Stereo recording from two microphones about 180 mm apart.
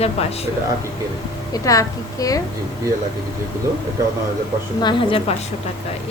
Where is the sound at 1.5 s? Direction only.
20° left (ahead or behind).